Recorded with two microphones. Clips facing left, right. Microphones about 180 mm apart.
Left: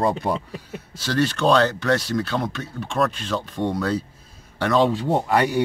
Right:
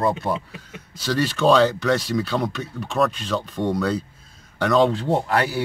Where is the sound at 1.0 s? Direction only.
Centre (ahead or behind).